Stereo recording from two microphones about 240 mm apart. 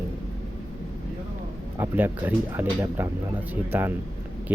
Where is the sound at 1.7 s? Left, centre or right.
Centre.